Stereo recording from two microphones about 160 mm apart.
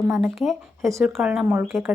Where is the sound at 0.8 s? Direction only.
20° right (ahead or behind).